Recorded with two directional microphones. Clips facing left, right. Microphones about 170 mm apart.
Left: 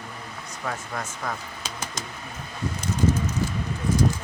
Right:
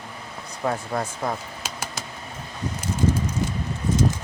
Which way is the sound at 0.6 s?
30° right (ahead or behind).